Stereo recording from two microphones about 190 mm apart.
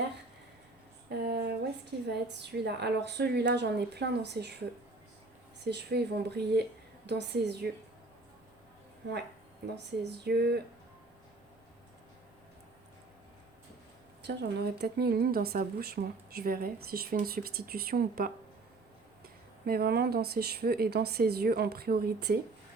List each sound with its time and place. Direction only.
1.2 s a sound: 60° right (ahead or behind)
2.0 s speech: 60° right (ahead or behind)
5.6 s speech: 60° right (ahead or behind)
9.0 s speech: 65° right (ahead or behind)
14.2 s speech: 65° right (ahead or behind)
19.6 s speech: 50° right (ahead or behind)